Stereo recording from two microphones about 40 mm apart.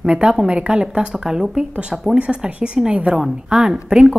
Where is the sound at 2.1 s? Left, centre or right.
Right.